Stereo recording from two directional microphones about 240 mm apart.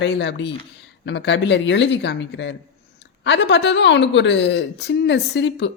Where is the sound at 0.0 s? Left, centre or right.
Left.